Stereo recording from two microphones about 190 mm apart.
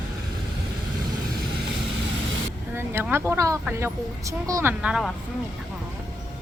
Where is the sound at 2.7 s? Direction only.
10° right (ahead or behind).